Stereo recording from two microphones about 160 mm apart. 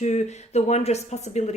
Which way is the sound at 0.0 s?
45° left (ahead or behind).